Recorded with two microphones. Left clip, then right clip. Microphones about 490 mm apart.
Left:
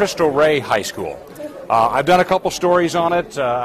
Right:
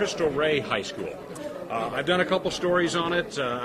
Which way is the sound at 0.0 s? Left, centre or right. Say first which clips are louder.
Left 10 dB; left.